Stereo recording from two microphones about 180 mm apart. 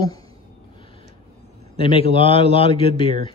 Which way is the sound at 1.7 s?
30° left (ahead or behind).